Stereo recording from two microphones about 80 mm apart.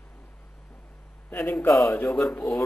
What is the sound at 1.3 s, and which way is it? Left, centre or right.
A man's voice, left.